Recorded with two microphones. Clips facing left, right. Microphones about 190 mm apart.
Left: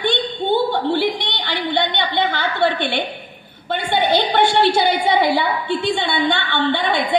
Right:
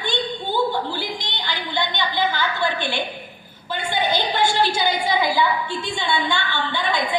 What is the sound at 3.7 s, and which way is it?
A woman's voice, 65° left (ahead or behind).